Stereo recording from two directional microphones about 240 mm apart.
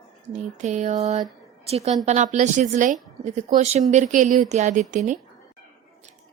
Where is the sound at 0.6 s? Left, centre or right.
Right.